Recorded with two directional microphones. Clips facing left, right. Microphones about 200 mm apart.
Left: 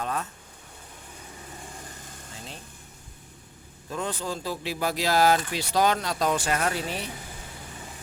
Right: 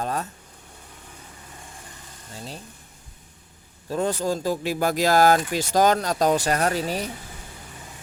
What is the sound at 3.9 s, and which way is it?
Speech, 40° right (ahead or behind).